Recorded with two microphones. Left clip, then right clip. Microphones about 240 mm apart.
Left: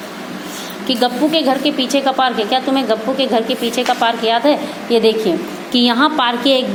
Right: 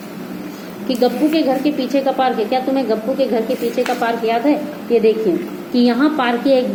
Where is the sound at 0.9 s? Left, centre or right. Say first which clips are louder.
Left 1 dB; left.